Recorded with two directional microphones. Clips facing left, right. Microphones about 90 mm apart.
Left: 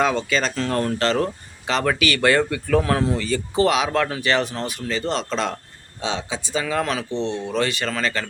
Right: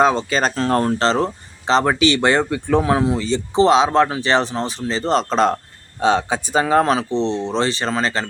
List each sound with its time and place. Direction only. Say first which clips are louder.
0.0 s speech: right 4 dB; 30° right (ahead or behind)